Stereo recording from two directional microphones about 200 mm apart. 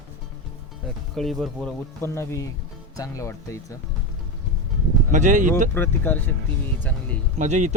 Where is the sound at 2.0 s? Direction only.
15° left (ahead or behind).